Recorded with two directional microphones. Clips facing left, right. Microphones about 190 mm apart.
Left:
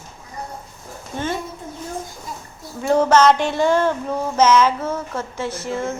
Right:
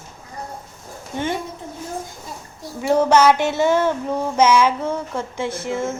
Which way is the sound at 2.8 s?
10° right (ahead or behind).